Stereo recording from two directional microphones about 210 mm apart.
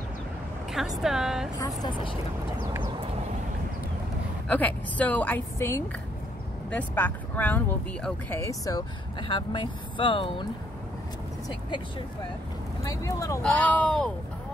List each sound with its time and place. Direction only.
0.7 s a woman's voice: centre (ahead or behind)
4.5 s speech: 5° left (ahead or behind); by 10.4 s 25° left (ahead or behind)
12.8 s speech: 15° left (ahead or behind)